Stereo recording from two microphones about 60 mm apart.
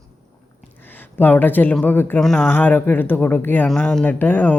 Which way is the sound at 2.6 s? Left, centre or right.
Left.